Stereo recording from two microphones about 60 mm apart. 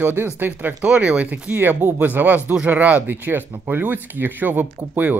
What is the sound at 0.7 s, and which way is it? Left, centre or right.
Speech, centre.